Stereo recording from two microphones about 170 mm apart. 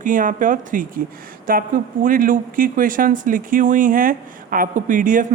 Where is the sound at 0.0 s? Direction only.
50° right (ahead or behind).